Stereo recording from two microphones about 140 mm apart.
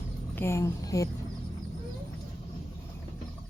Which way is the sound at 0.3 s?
20° left (ahead or behind).